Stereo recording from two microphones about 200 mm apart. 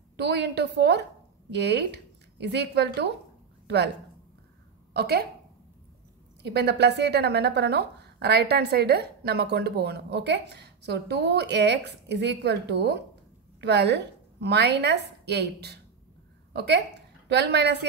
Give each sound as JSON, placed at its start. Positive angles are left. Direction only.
{"t": 0.2, "sound": "a woman's voice", "side_deg": -55}
{"t": 4.9, "sound": "speech", "side_deg": -50}
{"t": 6.4, "sound": "a woman's voice", "side_deg": -55}